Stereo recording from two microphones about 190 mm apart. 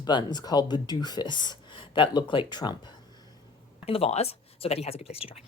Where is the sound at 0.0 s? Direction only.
25° left (ahead or behind).